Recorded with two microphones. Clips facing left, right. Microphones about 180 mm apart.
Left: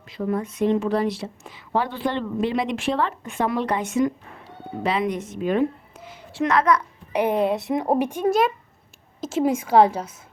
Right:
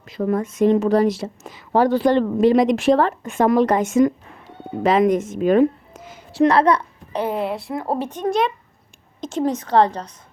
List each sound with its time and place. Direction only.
0.1 s a woman's voice: 50° right (ahead or behind); by 6.8 s 30° right (ahead or behind)
7.1 s speech: 15° left (ahead or behind)